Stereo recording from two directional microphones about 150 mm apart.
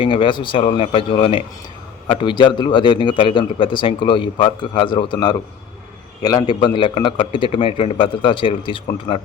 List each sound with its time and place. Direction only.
0.0 s a man's voice: 35° left (ahead or behind)
6.2 s a man's voice: 30° left (ahead or behind)